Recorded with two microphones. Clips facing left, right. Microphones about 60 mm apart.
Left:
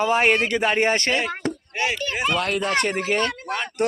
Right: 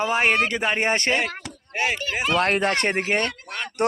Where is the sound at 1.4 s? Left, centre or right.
Left.